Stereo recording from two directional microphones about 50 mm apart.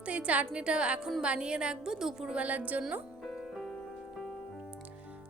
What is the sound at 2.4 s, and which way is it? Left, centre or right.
Speech, right.